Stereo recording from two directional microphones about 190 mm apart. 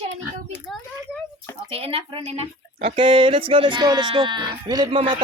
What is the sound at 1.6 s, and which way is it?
Speech, 30° right (ahead or behind).